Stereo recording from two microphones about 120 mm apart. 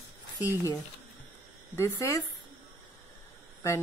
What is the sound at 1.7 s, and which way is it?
Speech, 25° left (ahead or behind).